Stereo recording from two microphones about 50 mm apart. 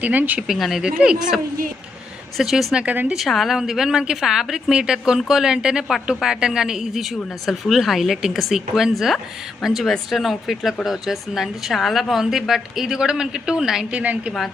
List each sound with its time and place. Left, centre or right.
0.0 s speech: right
0.4 s speech: centre
0.8 s a woman's voice: centre
2.4 s speech: centre
2.8 s speech: right
3.2 s a woman's voice: centre
13.9 s a woman's voice: right